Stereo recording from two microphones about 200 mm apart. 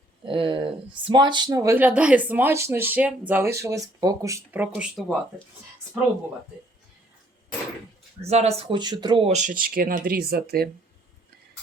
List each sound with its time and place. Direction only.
0.3 s speech: 25° right (ahead or behind); by 5.1 s 5° right (ahead or behind)
8.2 s speech: 30° right (ahead or behind); by 10.7 s 50° right (ahead or behind)